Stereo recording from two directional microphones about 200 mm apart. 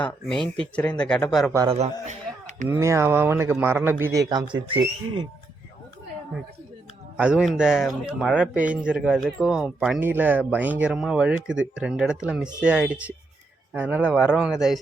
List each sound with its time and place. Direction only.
0.0 s speech: 5° left (ahead or behind)
1.7 s speech: 35° right (ahead or behind)
2.6 s a man's voice: 10° right (ahead or behind)
7.2 s speech: 5° right (ahead or behind)